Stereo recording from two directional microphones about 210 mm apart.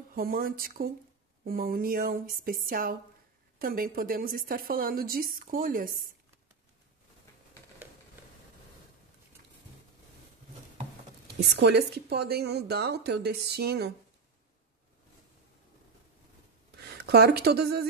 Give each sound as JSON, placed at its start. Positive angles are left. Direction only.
{"t": 0.1, "sound": "a woman's voice", "side_deg": -45}
{"t": 11.3, "sound": "a woman's voice", "side_deg": -50}
{"t": 17.0, "sound": "a woman's voice", "side_deg": -50}